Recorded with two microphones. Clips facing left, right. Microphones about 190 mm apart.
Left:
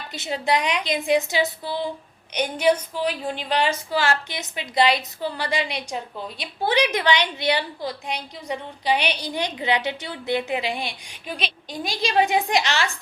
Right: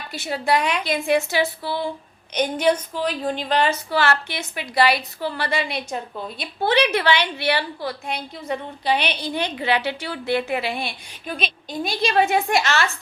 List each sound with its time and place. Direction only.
0.1 s a woman's voice: 20° left (ahead or behind)